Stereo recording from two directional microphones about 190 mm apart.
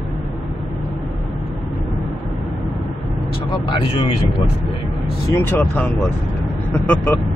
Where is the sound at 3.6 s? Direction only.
30° left (ahead or behind).